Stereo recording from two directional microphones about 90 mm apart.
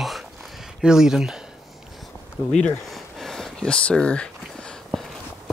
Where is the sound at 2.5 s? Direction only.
5° left (ahead or behind).